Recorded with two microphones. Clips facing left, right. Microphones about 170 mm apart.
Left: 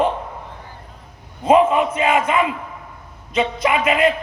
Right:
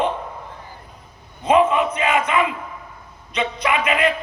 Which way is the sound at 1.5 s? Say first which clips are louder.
Left 2 dB; 30° left (ahead or behind).